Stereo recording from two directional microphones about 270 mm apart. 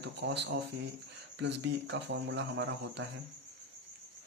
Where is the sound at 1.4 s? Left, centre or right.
Right.